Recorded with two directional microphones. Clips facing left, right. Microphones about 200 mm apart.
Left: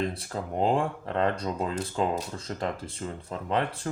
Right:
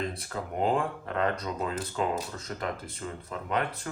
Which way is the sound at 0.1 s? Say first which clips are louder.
Left 2 dB; 30° left (ahead or behind).